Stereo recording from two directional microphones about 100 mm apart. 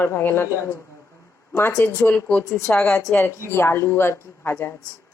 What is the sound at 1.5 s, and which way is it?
Speech, 25° left (ahead or behind).